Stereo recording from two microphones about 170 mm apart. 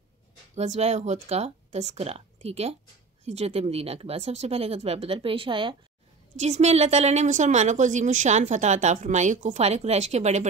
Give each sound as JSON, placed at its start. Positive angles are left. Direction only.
{"t": 0.6, "sound": "speech", "side_deg": -40}
{"t": 6.3, "sound": "a woman's voice", "side_deg": -40}